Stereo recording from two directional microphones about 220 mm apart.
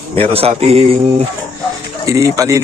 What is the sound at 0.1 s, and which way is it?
Speech, 25° right (ahead or behind).